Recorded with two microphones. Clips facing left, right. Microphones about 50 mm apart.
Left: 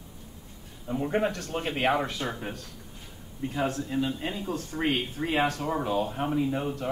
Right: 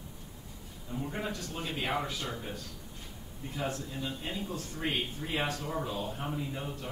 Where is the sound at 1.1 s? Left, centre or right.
Left.